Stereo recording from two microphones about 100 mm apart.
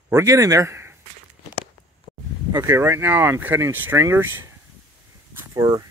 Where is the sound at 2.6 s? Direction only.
25° right (ahead or behind).